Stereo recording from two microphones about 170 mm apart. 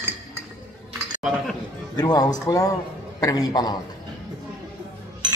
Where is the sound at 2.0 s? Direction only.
25° left (ahead or behind).